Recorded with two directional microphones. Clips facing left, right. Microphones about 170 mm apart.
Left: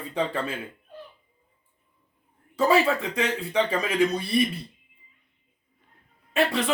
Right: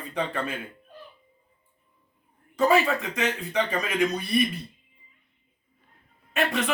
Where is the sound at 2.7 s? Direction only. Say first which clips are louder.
Left 1 dB; 30° left (ahead or behind).